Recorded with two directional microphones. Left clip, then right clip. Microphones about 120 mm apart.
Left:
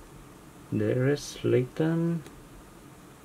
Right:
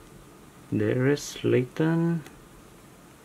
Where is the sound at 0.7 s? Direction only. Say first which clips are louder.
Right 2 dB; 30° right (ahead or behind).